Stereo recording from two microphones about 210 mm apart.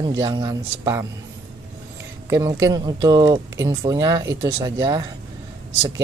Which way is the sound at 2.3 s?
15° right (ahead or behind).